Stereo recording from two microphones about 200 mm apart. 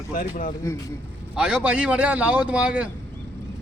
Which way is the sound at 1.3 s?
5° right (ahead or behind).